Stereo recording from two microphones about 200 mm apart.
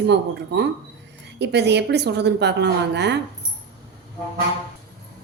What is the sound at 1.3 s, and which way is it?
A woman's voice, 60° right (ahead or behind).